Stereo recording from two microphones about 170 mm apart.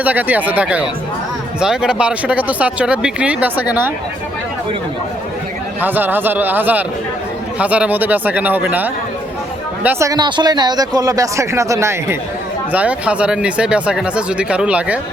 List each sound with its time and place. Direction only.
0.0 s speech: 10° right (ahead or behind)
5.8 s speech: 10° right (ahead or behind)